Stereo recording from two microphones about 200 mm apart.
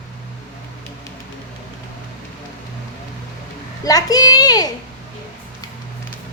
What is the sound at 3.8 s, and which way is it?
Speech, 20° left (ahead or behind).